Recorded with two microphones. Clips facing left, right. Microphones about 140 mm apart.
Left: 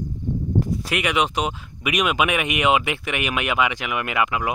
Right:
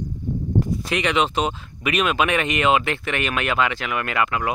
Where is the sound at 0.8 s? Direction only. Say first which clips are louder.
Right 1 dB; 10° left (ahead or behind).